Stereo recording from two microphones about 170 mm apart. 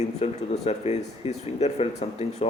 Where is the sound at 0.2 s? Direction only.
40° left (ahead or behind).